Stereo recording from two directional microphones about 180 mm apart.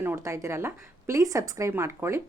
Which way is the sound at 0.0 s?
15° right (ahead or behind).